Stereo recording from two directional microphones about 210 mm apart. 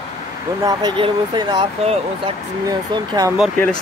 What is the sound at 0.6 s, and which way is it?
Speech, 20° right (ahead or behind).